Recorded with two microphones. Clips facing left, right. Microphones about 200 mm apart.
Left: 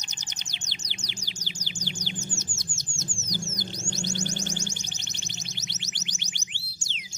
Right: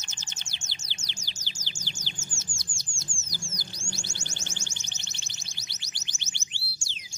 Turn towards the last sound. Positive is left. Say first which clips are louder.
# left 2 dB
turn(degrees=20)  # may be behind; listen again after turning